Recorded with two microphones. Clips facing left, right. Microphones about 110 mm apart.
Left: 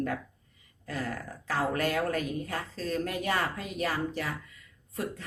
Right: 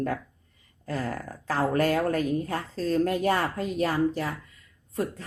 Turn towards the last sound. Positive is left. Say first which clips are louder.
# right 5 dB
turn(degrees=-35)  # may be behind; listen again after turning